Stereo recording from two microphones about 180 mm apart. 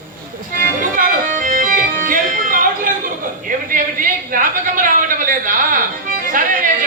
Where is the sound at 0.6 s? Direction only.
50° right (ahead or behind).